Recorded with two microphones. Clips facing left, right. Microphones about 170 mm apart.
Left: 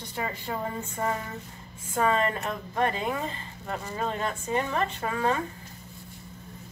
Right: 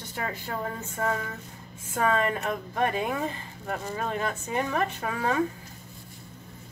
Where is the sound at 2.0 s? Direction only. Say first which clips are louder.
Right 1 dB; 5° right (ahead or behind).